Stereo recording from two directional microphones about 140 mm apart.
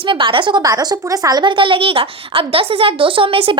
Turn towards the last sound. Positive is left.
turn(degrees=-40)  # may be behind; listen again after turning